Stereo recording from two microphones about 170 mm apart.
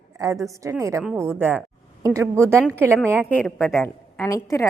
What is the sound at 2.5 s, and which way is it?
A woman's voice, 10° left (ahead or behind).